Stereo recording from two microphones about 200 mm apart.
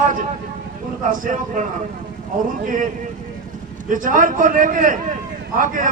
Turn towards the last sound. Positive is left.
turn(degrees=-40)  # may be behind; listen again after turning